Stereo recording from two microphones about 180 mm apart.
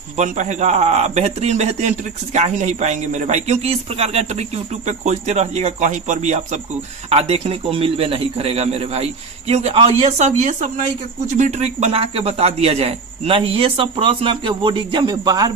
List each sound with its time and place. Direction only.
0.2 s speech: 40° right (ahead or behind); by 15.5 s 25° right (ahead or behind)